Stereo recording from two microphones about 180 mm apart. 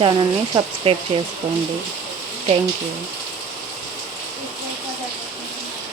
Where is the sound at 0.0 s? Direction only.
25° right (ahead or behind).